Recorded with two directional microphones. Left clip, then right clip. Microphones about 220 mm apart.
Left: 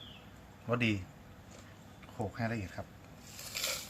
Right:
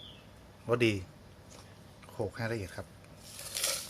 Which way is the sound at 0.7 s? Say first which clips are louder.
Right 4 dB; 55° right (ahead or behind).